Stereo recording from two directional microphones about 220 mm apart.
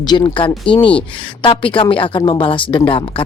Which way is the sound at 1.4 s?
25° left (ahead or behind).